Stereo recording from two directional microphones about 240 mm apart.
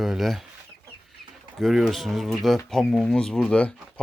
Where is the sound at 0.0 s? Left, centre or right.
Centre.